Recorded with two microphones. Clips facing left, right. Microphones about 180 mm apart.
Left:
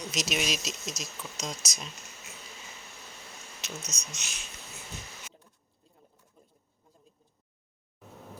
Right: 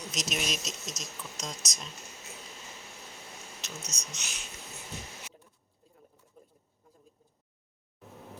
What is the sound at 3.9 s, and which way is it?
Speech, 35° right (ahead or behind).